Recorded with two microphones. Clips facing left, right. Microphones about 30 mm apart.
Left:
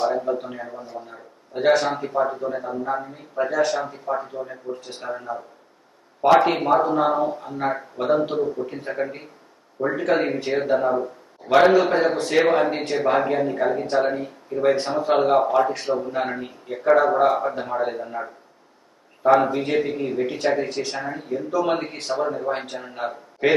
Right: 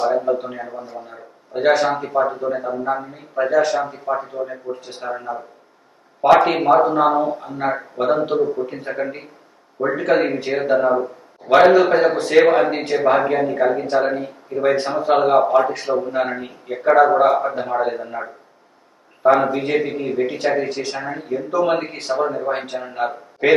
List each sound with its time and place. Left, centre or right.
0.1 s a man's voice: right
2.0 s a man's voice: right; by 3.8 s centre
3.8 s a man's voice: right
6.4 s a man's voice: right
6.8 s a man's voice: centre
19.2 s a man's voice: centre
21.0 s a man's voice: right
22.5 s a man's voice: centre
22.8 s a man's voice: right